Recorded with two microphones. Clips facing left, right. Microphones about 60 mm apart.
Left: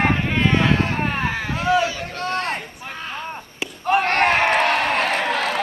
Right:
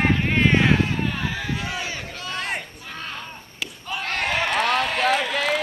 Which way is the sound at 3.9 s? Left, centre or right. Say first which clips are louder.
Left 9 dB; left.